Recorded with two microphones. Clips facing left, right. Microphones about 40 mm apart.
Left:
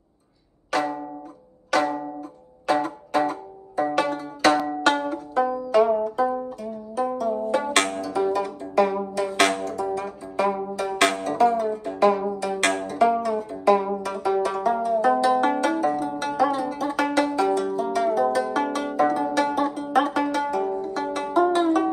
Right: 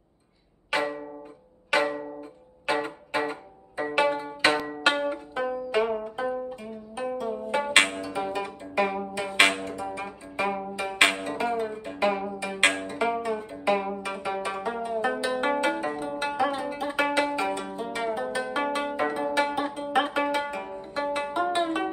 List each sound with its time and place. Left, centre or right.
0.7 s music: right